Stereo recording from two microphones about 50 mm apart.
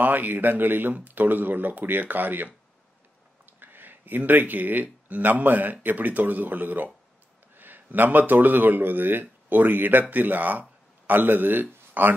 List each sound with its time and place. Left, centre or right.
0.0 s speech: right
3.5 s speech: right